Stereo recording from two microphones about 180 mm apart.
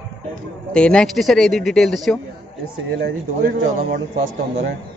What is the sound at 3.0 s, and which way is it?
A man's voice, 50° right (ahead or behind).